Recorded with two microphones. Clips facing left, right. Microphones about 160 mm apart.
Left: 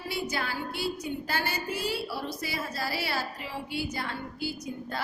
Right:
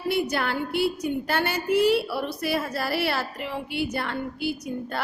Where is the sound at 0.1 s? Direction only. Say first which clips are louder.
Right 8 dB; 65° right (ahead or behind).